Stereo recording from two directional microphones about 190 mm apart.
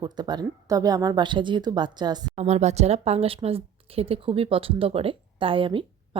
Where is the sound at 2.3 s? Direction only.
35° right (ahead or behind).